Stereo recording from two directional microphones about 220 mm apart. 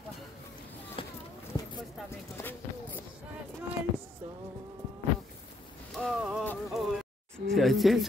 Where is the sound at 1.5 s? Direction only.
15° left (ahead or behind).